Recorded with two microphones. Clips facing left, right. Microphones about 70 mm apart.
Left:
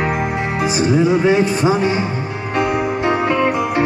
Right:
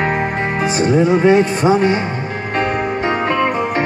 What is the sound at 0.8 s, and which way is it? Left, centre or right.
Music, right.